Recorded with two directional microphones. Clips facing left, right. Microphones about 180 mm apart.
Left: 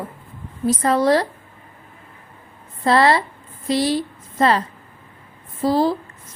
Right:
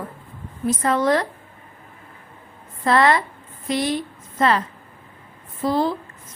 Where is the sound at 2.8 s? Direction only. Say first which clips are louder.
Left 2 dB; 30° left (ahead or behind).